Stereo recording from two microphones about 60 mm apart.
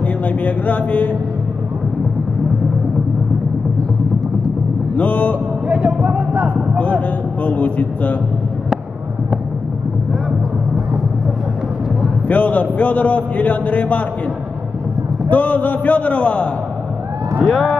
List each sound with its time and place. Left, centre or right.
0.0 s speech: left
4.9 s a sound: left
5.7 s basketball bounce: centre
6.4 s a man's voice: right
7.4 s a man's voice: left
12.3 s a man's voice: left
15.2 s a man's voice: left
17.5 s speech: centre